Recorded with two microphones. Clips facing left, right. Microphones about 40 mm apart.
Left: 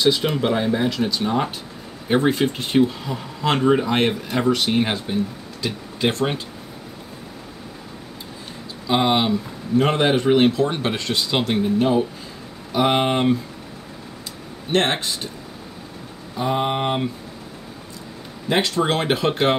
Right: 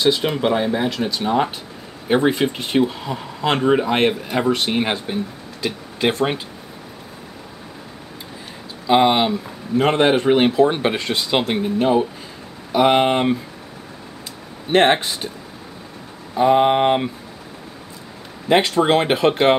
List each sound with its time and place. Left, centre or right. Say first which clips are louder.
0.0 s speech: right 1 dB; centre
8.8 s speech: right 4 dB; centre
14.7 s speech: right 5 dB; centre
16.3 s a sound: right 8 dB; centre
18.5 s speech: right 5 dB; centre